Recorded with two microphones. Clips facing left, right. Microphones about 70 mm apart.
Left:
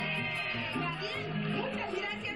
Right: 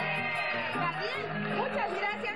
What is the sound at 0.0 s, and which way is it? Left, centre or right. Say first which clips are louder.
Music: right 4 dB; right.